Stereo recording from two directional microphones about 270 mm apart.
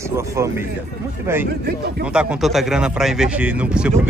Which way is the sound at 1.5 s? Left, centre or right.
Right.